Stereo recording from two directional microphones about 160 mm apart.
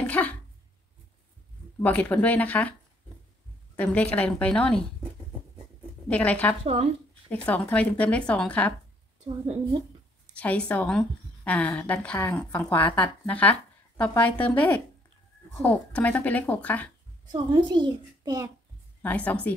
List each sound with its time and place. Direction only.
0.0 s a sound: 10° left (ahead or behind)
1.8 s a woman's voice: 10° left (ahead or behind)
3.7 s a woman's voice: 10° left (ahead or behind)
6.0 s a woman's voice: 10° left (ahead or behind)
6.6 s speech: 40° right (ahead or behind)
7.2 s a woman's voice: 10° left (ahead or behind)
10.3 s a woman's voice: 10° left (ahead or behind)
17.3 s a child's voice: 25° right (ahead or behind)
19.0 s a woman's voice: 10° left (ahead or behind)